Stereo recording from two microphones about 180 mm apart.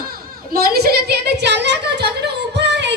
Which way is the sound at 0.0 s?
55° right (ahead or behind).